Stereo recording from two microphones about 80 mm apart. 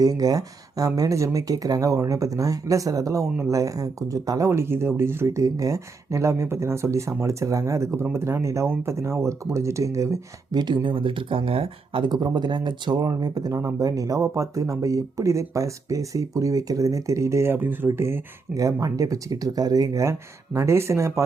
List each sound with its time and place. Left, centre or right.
0.0 s speech: right
10.5 s speech: right
11.9 s speech: right
13.0 s speech: right
13.6 s speech: right
18.5 s speech: right